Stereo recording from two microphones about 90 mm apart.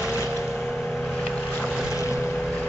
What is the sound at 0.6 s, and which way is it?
Vehicle, 5° left (ahead or behind).